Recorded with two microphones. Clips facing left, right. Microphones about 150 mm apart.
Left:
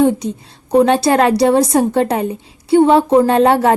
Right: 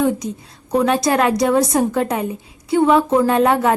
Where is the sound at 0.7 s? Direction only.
30° left (ahead or behind).